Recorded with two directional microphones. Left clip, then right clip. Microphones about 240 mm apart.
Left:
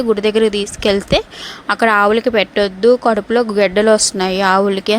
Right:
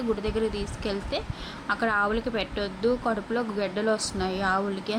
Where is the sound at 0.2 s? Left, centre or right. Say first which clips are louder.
Left 15 dB; left.